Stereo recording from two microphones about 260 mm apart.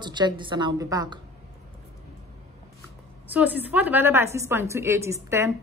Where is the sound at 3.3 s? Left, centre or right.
Centre.